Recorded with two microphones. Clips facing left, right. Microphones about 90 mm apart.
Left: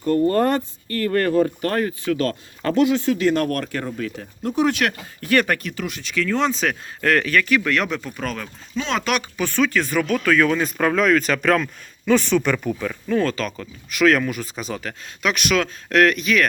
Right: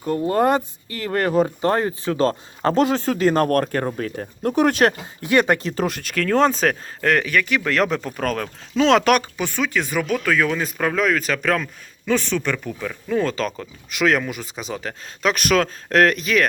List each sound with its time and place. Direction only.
0.0 s speech: 10° right (ahead or behind); by 4.8 s 50° right (ahead or behind)
5.2 s speech: 20° right (ahead or behind)
5.7 s speech: 45° right (ahead or behind)
7.0 s speech: 20° right (ahead or behind); by 8.4 s 45° right (ahead or behind)
8.7 s speech: 85° right
9.4 s speech: 15° right (ahead or behind)
13.3 s speech: 25° right (ahead or behind)
14.8 s speech: 35° right (ahead or behind)